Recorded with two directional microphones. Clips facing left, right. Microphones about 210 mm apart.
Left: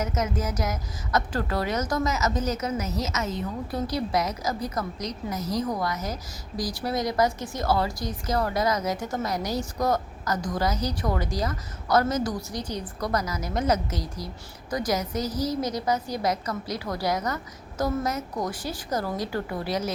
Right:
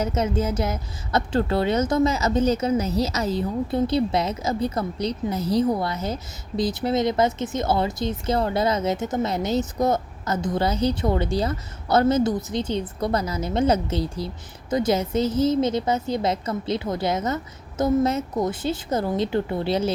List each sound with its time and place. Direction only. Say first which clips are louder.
0.0 s speech: right 5 dB; 30° right (ahead or behind)